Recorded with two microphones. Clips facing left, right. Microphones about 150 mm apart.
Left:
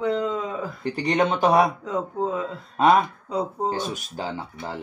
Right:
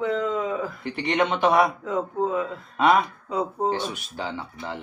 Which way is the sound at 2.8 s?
35° left (ahead or behind).